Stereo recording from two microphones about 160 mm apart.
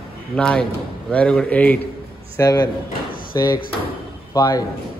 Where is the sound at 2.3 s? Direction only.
20° left (ahead or behind).